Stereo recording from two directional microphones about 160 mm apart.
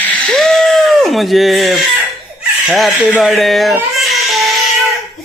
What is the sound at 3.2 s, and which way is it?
Baby cry, centre (ahead or behind).